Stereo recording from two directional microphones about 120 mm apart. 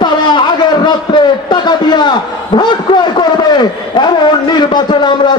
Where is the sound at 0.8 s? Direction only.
40° left (ahead or behind).